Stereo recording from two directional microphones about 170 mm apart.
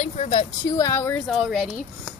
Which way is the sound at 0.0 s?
35° left (ahead or behind).